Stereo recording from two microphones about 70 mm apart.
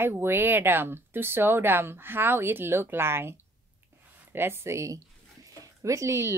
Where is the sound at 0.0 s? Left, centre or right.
Right.